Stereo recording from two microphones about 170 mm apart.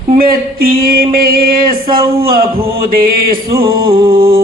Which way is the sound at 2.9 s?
60° right (ahead or behind).